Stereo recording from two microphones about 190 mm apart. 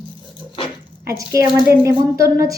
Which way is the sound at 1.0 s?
15° right (ahead or behind).